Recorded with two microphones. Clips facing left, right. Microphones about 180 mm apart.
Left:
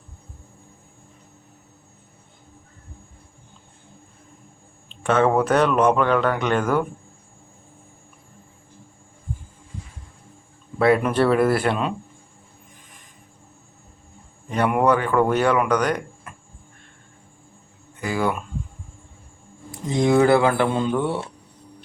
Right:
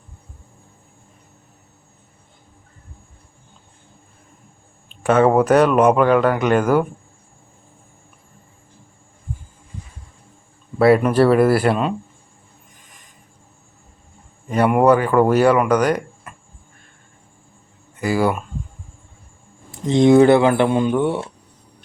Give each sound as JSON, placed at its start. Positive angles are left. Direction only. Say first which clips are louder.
{"t": 5.0, "sound": "speech", "louder": "right 4 dB", "side_deg": -10}
{"t": 10.8, "sound": "speech", "louder": "right 4 dB", "side_deg": -5}
{"t": 14.5, "sound": "speech", "louder": "right 5 dB", "side_deg": -5}
{"t": 18.0, "sound": "speech", "louder": "right 5 dB", "side_deg": -10}
{"t": 19.7, "sound": "speech", "louder": "right 6 dB", "side_deg": -25}